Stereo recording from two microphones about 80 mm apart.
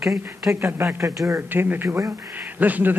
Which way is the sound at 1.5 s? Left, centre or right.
Right.